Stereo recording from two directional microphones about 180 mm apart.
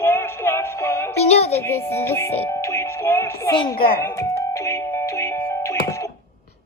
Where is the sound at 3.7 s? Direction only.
55° left (ahead or behind).